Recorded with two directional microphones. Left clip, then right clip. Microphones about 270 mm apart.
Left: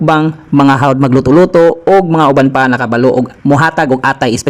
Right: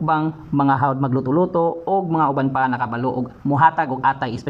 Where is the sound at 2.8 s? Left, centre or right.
Left.